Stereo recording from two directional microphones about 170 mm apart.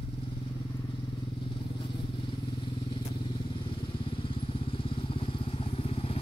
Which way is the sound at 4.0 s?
30° left (ahead or behind).